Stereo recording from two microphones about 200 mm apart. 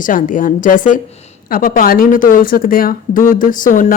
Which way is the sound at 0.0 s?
40° left (ahead or behind).